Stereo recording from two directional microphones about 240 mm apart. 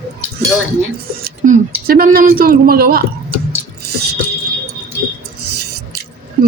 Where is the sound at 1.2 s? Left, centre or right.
Right.